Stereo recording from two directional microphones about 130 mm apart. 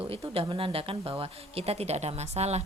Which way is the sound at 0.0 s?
45° right (ahead or behind).